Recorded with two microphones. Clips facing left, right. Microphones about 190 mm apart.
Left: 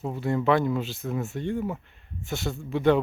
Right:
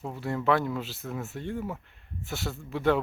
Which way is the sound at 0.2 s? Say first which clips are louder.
Left 3 dB; centre (ahead or behind).